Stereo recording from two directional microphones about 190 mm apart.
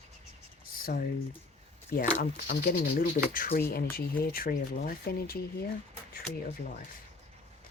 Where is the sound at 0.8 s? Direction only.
50° left (ahead or behind).